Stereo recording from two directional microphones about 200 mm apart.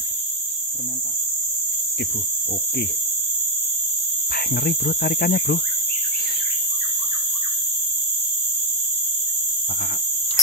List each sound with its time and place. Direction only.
4.6 s cricket: 50° left (ahead or behind)